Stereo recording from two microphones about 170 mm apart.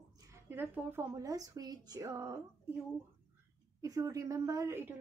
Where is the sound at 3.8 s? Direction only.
20° right (ahead or behind).